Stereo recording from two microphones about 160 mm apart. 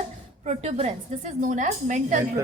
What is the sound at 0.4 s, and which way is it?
A woman's voice, 45° right (ahead or behind).